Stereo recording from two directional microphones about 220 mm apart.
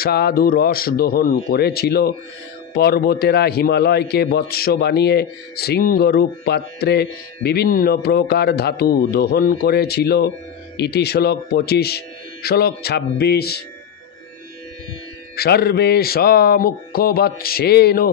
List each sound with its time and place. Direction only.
0.0 s a man's voice: 45° left (ahead or behind)
15.3 s a man's voice: 45° left (ahead or behind)